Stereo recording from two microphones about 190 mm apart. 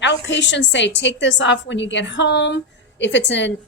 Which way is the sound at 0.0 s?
70° left (ahead or behind).